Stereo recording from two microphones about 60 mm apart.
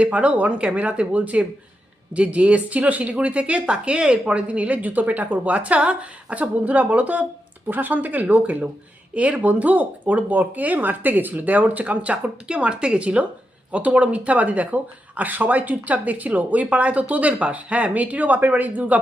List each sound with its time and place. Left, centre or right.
0.0 s speech: right